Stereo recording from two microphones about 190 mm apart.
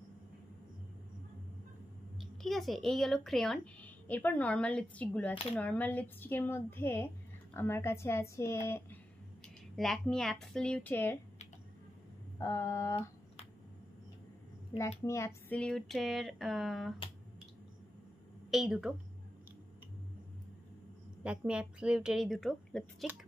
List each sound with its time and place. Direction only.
2.1 s speech: centre (ahead or behind)
9.8 s speech: centre (ahead or behind)
12.4 s speech: 15° left (ahead or behind)
14.8 s speech: 15° left (ahead or behind)
18.5 s speech: centre (ahead or behind)
21.2 s speech: 5° right (ahead or behind)